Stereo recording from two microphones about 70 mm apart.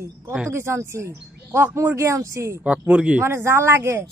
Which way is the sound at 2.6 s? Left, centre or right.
Centre.